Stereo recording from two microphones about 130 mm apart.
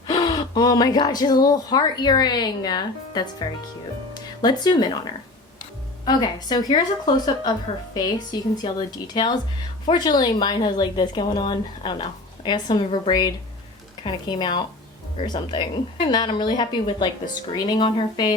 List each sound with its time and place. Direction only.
0.1 s speech: 35° left (ahead or behind)
6.1 s speech: 30° left (ahead or behind)